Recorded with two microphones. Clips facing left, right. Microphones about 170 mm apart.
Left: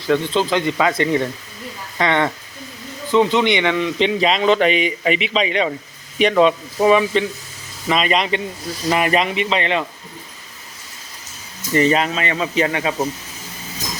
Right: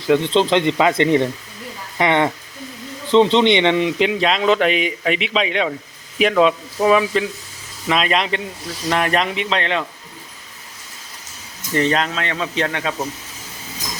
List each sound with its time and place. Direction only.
0.1 s speech: 20° right (ahead or behind)
3.9 s speech: 5° right (ahead or behind)
11.7 s speech: 5° left (ahead or behind)